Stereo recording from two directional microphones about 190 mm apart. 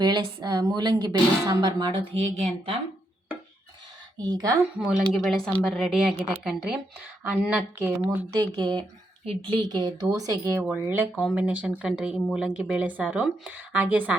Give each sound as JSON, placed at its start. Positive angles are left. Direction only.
{"t": 0.0, "sound": "speech", "side_deg": -25}
{"t": 4.2, "sound": "speech", "side_deg": -20}
{"t": 5.1, "sound": "speech", "side_deg": 0}
{"t": 8.4, "sound": "speech", "side_deg": -20}